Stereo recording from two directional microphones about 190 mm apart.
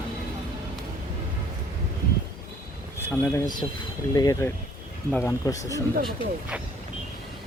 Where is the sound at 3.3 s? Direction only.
20° left (ahead or behind).